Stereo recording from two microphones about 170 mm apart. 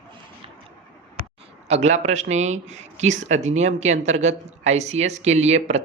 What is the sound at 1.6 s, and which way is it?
Speech, 40° right (ahead or behind).